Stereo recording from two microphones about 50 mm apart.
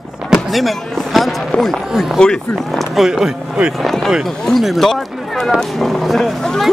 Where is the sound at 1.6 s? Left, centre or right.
Centre.